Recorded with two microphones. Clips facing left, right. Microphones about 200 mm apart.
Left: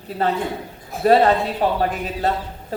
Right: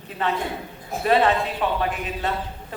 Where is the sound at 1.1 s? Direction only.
40° left (ahead or behind).